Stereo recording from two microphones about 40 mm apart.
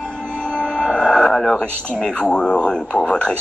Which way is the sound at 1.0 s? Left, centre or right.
Centre.